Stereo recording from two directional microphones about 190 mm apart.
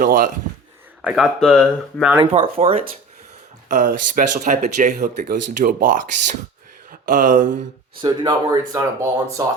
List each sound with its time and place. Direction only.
0.0 s speech: 45° right (ahead or behind)
1.0 s speech: centre (ahead or behind)
2.3 s speech: 30° right (ahead or behind)
3.7 s speech: 45° right (ahead or behind)
8.0 s speech: 20° right (ahead or behind)